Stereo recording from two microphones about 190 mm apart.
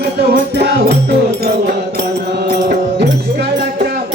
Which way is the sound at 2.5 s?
60° right (ahead or behind).